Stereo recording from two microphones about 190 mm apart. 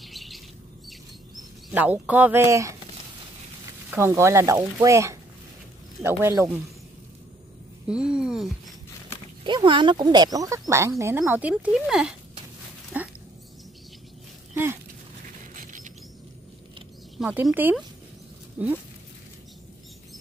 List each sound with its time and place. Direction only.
0.0 s bird: centre (ahead or behind)
1.7 s speech: 10° right (ahead or behind)
3.9 s speech: 15° right (ahead or behind)
7.9 s speech: 5° right (ahead or behind)
9.4 s speech: 25° right (ahead or behind); by 12.2 s 5° right (ahead or behind)
12.9 s a sound: 10° right (ahead or behind)
15.5 s patter: 45° right (ahead or behind)
17.2 s speech: 5° right (ahead or behind)